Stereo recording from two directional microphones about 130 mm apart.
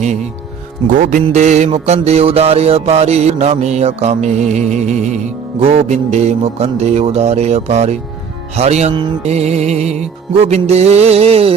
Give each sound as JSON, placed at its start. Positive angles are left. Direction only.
{"t": 0.9, "sound": "music", "side_deg": -90}
{"t": 1.3, "sound": "mantra", "side_deg": -65}
{"t": 10.4, "sound": "music", "side_deg": -55}